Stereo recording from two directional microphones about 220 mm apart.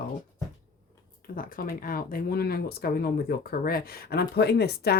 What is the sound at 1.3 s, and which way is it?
Speech, 40° left (ahead or behind).